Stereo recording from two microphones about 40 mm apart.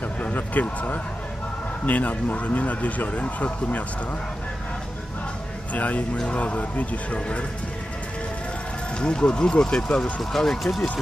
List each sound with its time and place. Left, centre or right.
0.2 s speech: left
5.7 s speech: left
9.0 s speech: left
10.3 s speech: centre